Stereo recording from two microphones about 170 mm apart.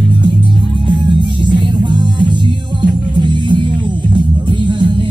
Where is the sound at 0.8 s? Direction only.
25° right (ahead or behind).